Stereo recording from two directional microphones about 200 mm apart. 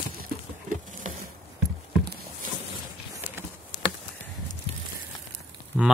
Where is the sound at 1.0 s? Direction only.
35° right (ahead or behind).